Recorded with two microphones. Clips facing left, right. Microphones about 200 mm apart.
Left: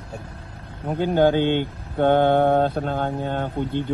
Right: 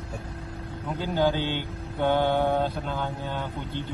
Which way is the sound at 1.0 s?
55° left (ahead or behind).